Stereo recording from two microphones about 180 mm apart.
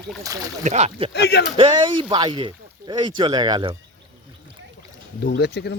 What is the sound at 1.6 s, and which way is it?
Speech, 25° right (ahead or behind).